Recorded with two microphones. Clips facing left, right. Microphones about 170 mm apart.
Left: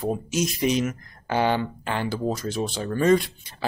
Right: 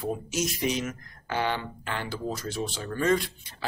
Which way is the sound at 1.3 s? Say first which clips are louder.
Left 6 dB; 20° left (ahead or behind).